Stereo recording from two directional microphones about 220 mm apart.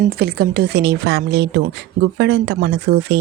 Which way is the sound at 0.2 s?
45° right (ahead or behind).